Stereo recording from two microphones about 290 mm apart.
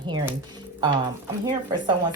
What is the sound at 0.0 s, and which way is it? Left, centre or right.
Speech, centre.